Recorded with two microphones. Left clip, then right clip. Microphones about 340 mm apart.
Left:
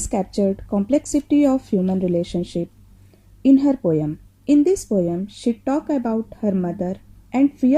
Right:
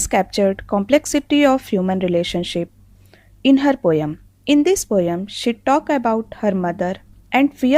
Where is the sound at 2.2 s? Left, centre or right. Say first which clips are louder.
Right 4 dB; right.